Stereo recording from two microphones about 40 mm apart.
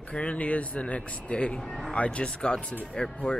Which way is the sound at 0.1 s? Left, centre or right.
Left.